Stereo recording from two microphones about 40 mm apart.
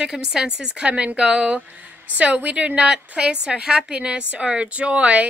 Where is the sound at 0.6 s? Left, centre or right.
Right.